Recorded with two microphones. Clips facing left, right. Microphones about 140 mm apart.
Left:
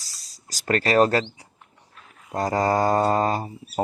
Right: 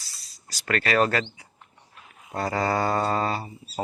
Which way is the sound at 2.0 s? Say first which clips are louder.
Even; 5° right (ahead or behind).